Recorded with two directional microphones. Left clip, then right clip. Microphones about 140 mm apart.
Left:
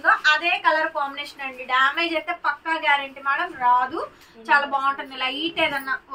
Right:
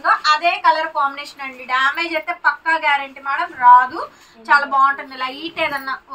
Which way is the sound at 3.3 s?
10° right (ahead or behind).